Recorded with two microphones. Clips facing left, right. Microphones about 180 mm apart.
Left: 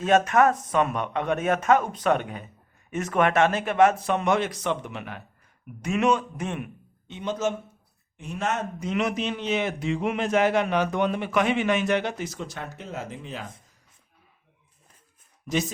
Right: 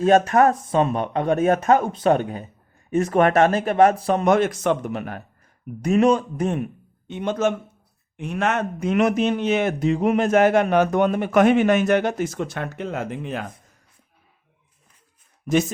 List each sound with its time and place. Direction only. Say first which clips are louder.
0.0 s a man's voice: right 4 dB; 35° right (ahead or behind)
7.1 s a man's voice: right 5 dB; 55° right (ahead or behind)